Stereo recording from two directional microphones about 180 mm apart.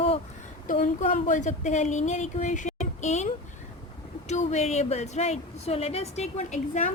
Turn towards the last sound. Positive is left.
turn(degrees=40)  # may be behind; listen again after turning